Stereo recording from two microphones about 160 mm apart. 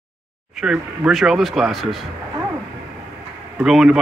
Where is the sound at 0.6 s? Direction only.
5° right (ahead or behind).